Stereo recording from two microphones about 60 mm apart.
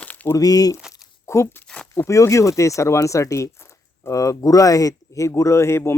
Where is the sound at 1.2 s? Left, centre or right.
Left.